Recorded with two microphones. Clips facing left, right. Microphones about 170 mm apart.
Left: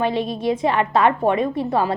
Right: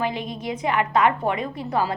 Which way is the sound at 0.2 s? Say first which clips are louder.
Left 8 dB; 25° left (ahead or behind).